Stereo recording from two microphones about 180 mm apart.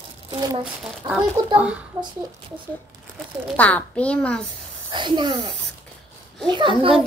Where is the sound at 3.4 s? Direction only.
10° left (ahead or behind).